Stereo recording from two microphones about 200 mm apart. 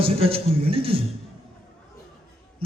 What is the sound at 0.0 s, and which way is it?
A man's voice, 30° right (ahead or behind).